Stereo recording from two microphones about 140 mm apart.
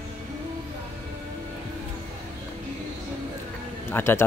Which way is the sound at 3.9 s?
20° left (ahead or behind).